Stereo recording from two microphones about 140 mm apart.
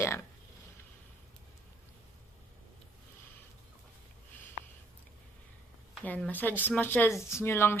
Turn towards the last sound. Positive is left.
turn(degrees=15)  # may be behind; listen again after turning